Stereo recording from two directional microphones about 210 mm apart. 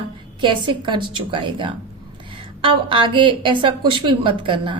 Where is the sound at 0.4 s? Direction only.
20° right (ahead or behind).